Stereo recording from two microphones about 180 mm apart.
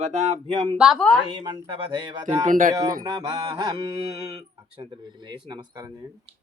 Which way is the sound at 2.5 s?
50° right (ahead or behind).